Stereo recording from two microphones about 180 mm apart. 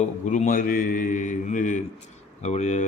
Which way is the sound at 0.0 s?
45° left (ahead or behind).